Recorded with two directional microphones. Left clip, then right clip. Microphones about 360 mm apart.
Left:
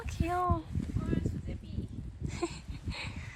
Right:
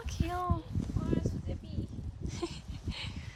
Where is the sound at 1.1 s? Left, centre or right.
Centre.